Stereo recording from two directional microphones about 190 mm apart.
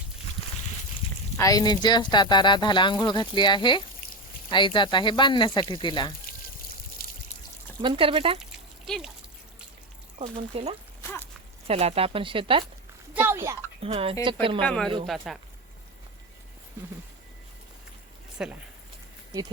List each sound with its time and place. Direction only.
1.4 s speech: 20° left (ahead or behind)
6.2 s trickle: 50° left (ahead or behind)
7.8 s speech: 25° right (ahead or behind)
8.4 s a sound: 5° right (ahead or behind)
10.2 s speech: 30° right (ahead or behind)
11.0 s a sound: 10° left (ahead or behind)
11.7 s speech: 30° right (ahead or behind)
13.2 s a woman's voice: 15° right (ahead or behind)
13.8 s speech: 30° right (ahead or behind)
14.6 s speech: 5° left (ahead or behind)
18.4 s speech: 5° right (ahead or behind)